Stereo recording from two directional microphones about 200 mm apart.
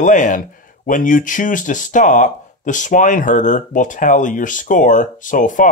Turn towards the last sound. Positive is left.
turn(degrees=40)  # may be behind; listen again after turning